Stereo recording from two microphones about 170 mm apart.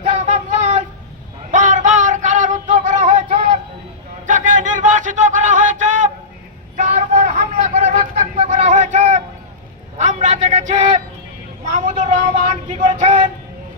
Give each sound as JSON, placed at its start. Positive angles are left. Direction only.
{"t": 0.2, "sound": "child singing", "side_deg": -45}
{"t": 1.5, "sound": "music", "side_deg": -45}
{"t": 4.3, "sound": "a sound", "side_deg": -45}
{"t": 11.7, "sound": "vehicle", "side_deg": -45}